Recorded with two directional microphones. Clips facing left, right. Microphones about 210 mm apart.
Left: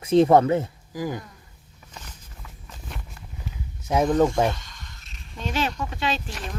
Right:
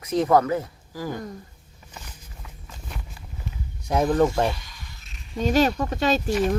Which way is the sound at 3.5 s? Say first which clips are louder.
Right 1 dB; 5° left (ahead or behind).